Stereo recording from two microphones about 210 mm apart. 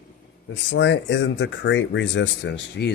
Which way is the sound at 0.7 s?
60° left (ahead or behind).